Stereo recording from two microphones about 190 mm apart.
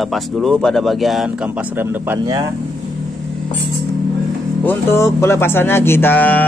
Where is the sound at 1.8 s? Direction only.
15° right (ahead or behind).